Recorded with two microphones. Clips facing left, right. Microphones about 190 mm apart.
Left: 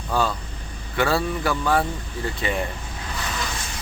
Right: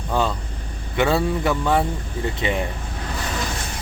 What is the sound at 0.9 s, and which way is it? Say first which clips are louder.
A man's voice: right 3 dB; 20° right (ahead or behind).